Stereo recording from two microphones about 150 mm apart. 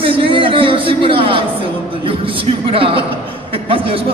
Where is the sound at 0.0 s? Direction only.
35° right (ahead or behind).